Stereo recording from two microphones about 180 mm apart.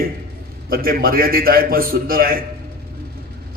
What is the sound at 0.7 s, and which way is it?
A man's voice, 55° right (ahead or behind).